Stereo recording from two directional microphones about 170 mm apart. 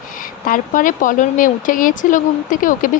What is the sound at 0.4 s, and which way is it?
Speech, 50° left (ahead or behind).